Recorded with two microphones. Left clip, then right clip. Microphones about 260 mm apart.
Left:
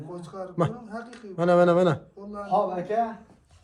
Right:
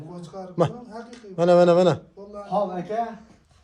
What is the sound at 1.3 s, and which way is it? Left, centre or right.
Speech, centre.